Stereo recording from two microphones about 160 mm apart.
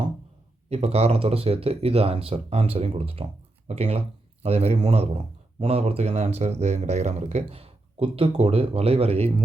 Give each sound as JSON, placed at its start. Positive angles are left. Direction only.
{"t": 0.7, "sound": "speech", "side_deg": -40}